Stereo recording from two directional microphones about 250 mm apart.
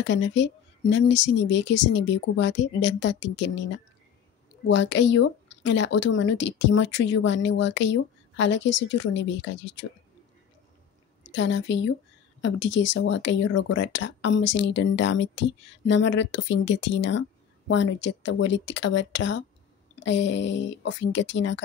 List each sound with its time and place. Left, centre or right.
0.0 s speech: left
11.3 s speech: left
13.5 s speech: left
13.7 s speech: left